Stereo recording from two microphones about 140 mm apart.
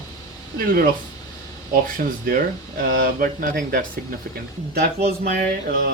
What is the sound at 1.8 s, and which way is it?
Speech, 80° right.